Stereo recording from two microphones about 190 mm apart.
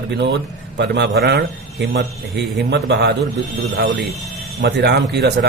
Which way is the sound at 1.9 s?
75° right (ahead or behind).